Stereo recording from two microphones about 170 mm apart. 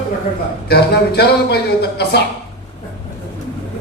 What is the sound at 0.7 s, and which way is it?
A woman's voice, 70° left (ahead or behind).